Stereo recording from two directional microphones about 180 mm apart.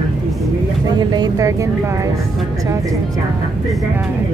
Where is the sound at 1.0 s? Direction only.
25° right (ahead or behind).